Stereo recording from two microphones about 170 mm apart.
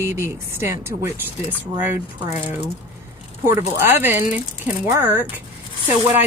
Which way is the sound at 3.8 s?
15° right (ahead or behind).